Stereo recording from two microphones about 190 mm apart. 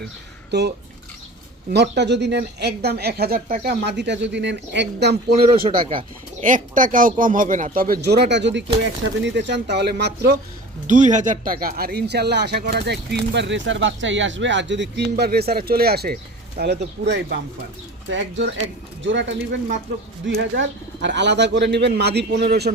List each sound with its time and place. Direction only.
0.5 s speech: 65° right (ahead or behind)
1.7 s speech: 60° right (ahead or behind)
6.4 s speech: 45° right (ahead or behind); by 10.3 s 60° right (ahead or behind)
10.8 s speech: 40° right (ahead or behind); by 17.3 s 60° right (ahead or behind)
18.1 s speech: 75° right (ahead or behind); by 22.7 s 60° right (ahead or behind)